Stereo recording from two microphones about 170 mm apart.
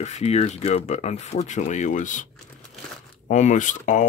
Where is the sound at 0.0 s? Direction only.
40° left (ahead or behind).